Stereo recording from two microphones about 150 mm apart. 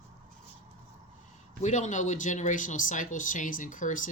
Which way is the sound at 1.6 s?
50° left (ahead or behind).